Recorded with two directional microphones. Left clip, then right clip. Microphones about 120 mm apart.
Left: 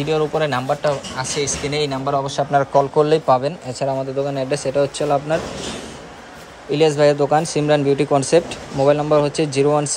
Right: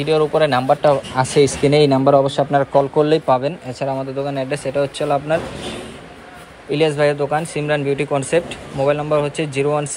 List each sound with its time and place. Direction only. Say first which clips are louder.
0.0 s speech: right 4 dB; 15° left (ahead or behind)
1.2 s speech: right 9 dB; 15° right (ahead or behind)
2.0 s speech: right 7 dB; 55° right (ahead or behind)
2.2 s a man's voice: right 1 dB; centre (ahead or behind)
2.6 s speech: even; 15° right (ahead or behind)
3.1 s speech: even; 15° left (ahead or behind)
6.7 s speech: left 2 dB; 25° left (ahead or behind)